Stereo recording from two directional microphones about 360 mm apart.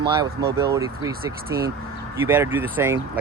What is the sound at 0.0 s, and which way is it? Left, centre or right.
Speech, centre.